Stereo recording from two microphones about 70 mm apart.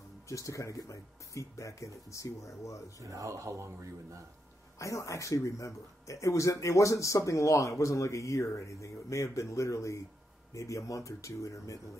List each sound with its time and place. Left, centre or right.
0.3 s speech: left
3.0 s speech: right
4.7 s speech: left